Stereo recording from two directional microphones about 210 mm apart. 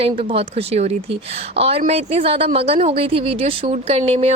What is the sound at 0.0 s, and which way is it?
A woman's voice, 25° right (ahead or behind).